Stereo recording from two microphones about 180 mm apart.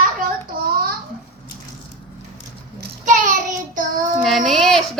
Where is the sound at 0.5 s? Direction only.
50° right (ahead or behind).